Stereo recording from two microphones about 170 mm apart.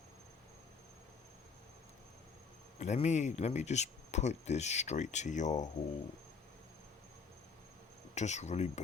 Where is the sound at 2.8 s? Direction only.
45° left (ahead or behind).